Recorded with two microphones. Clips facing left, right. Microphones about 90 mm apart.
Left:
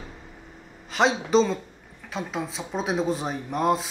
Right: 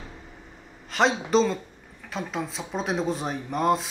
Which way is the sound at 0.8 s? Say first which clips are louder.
Even; centre (ahead or behind).